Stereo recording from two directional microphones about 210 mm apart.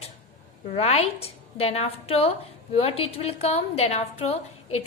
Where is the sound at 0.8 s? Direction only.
30° left (ahead or behind).